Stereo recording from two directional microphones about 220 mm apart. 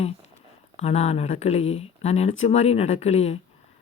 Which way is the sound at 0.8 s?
30° left (ahead or behind).